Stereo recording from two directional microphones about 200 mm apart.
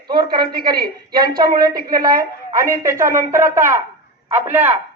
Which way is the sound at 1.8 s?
45° right (ahead or behind).